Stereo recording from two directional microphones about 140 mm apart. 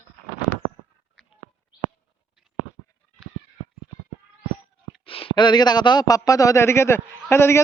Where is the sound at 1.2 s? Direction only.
Centre (ahead or behind).